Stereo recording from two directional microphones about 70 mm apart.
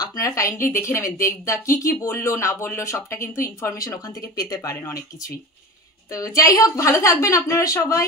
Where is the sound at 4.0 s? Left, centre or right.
Left.